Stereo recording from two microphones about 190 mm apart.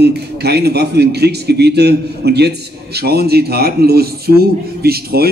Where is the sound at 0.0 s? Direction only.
60° right (ahead or behind).